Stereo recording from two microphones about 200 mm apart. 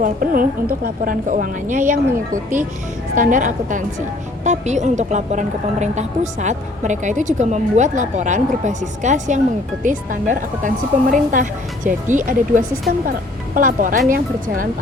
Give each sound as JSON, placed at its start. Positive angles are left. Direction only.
{"t": 0.0, "sound": "a woman's voice", "side_deg": -45}